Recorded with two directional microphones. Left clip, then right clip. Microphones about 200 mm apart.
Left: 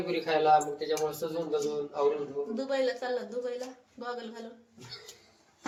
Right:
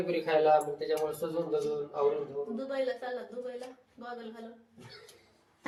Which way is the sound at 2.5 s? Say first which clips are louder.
Left 4 dB; 55° left (ahead or behind).